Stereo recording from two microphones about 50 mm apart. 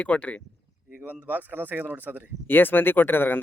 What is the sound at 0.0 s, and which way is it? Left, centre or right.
Speech, left.